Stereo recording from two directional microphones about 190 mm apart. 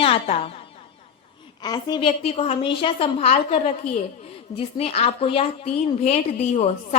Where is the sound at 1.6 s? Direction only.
20° left (ahead or behind).